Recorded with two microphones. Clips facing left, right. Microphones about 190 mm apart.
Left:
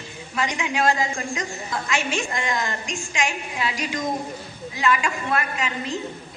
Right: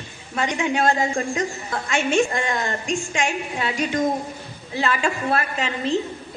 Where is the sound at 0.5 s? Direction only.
35° right (ahead or behind).